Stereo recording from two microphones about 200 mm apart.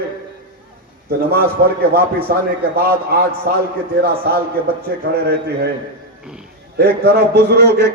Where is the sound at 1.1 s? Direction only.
50° right (ahead or behind).